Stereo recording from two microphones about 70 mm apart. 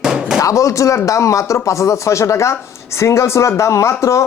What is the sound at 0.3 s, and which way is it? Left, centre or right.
Speech, left.